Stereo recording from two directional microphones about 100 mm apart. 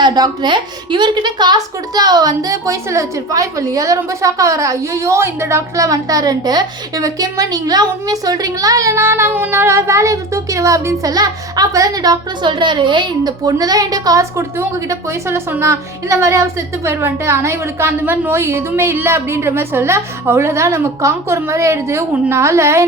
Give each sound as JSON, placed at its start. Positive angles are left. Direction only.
{"t": 0.0, "sound": "a woman's voice", "side_deg": -45}
{"t": 12.5, "sound": "a woman's voice", "side_deg": -55}